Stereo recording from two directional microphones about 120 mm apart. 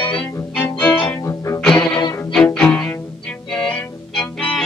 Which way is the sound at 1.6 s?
5° left (ahead or behind).